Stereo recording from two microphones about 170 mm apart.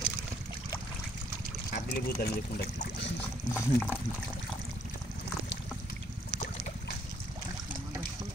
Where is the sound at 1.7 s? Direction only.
70° left (ahead or behind).